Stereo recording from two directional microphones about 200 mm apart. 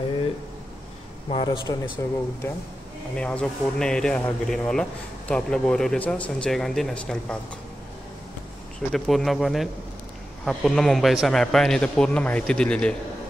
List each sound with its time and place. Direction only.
1.3 s speech: 25° left (ahead or behind)
3.2 s a man's voice: 5° left (ahead or behind)
8.9 s a man's voice: centre (ahead or behind)